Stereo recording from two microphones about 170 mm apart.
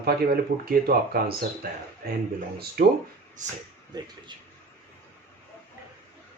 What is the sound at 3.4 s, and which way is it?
Speech, 45° right (ahead or behind).